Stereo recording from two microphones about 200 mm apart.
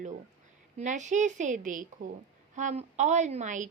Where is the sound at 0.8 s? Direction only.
40° right (ahead or behind).